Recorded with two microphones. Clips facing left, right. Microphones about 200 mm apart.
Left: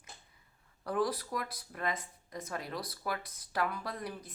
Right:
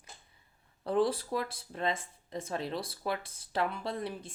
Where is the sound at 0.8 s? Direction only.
25° right (ahead or behind).